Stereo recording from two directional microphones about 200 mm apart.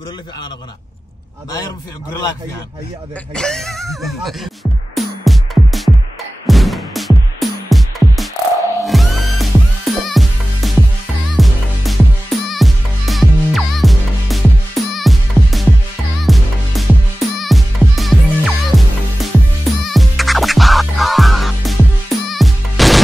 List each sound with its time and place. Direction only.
3.3 s speech: 5° left (ahead or behind)
4.9 s music: centre (ahead or behind)